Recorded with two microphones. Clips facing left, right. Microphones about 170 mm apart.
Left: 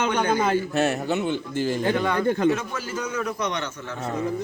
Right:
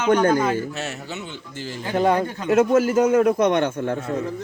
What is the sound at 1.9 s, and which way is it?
A man's voice, 45° right (ahead or behind).